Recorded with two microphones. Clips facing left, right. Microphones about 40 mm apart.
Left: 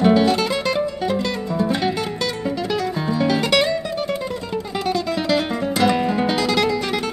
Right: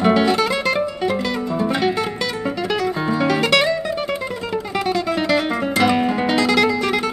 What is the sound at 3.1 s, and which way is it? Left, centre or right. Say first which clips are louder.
Music: right 1 dB; centre.